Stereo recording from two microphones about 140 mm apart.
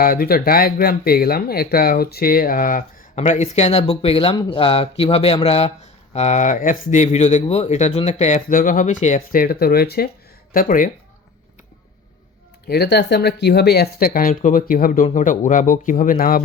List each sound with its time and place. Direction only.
0.0 s speech: 90° left
3.2 s speech: 60° left (ahead or behind); by 10.9 s 75° left (ahead or behind)
14.0 s speech: 90° left